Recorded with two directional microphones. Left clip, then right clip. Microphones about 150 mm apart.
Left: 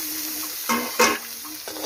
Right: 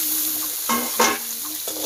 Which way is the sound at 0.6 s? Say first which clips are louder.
Even; 35° left (ahead or behind).